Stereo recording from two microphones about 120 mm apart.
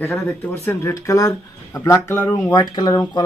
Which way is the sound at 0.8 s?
25° left (ahead or behind).